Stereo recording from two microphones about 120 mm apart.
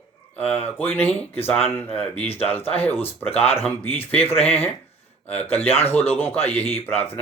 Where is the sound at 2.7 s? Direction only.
15° left (ahead or behind).